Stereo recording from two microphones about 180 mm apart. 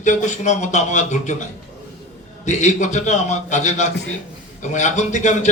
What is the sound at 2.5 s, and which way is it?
Speech, 40° left (ahead or behind).